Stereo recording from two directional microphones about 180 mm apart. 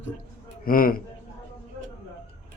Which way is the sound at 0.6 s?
50° left (ahead or behind).